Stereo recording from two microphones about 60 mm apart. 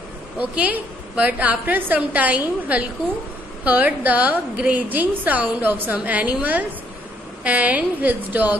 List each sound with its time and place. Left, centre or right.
0.4 s a woman's voice: right